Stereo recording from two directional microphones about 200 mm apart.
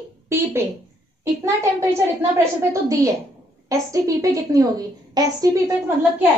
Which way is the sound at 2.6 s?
15° right (ahead or behind).